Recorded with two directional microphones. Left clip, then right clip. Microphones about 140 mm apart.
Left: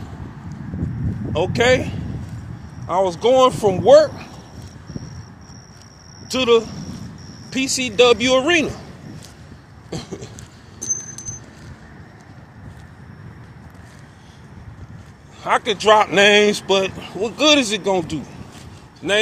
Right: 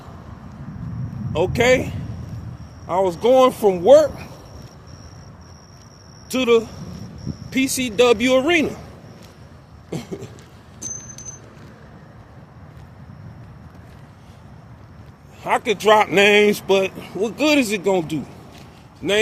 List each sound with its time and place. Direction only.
1.3 s speech: 40° right (ahead or behind)
6.3 s speech: 35° right (ahead or behind)
7.5 s speech: 45° right (ahead or behind)
9.9 s cough: 40° right (ahead or behind)
15.4 s speech: 40° right (ahead or behind)